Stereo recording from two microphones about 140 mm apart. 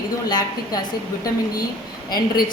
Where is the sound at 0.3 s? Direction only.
30° left (ahead or behind).